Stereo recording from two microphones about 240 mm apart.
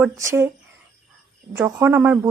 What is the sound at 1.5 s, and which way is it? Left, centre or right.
Speech, centre.